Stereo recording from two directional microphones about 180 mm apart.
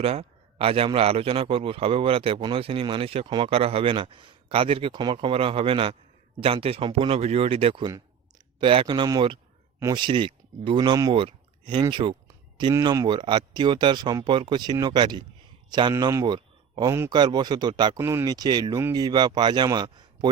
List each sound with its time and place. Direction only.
0.0 s a man's voice: 35° right (ahead or behind)